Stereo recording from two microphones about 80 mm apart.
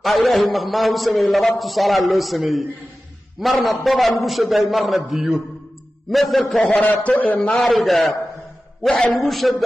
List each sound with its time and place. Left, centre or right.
0.0 s a man's voice: centre
6.5 s a man's voice: centre
7.6 s a man's voice: centre